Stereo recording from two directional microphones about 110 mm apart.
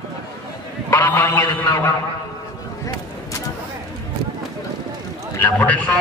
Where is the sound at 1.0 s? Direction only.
20° left (ahead or behind).